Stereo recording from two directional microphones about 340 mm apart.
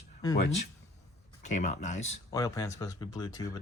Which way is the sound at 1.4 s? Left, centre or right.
Left.